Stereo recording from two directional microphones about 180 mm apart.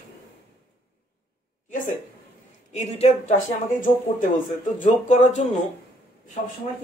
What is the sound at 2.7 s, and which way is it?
Speech, 35° left (ahead or behind).